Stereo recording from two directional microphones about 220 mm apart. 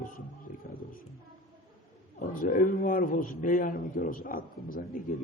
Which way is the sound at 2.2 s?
40° left (ahead or behind).